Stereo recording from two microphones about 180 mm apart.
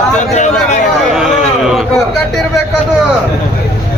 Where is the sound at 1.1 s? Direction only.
5° right (ahead or behind).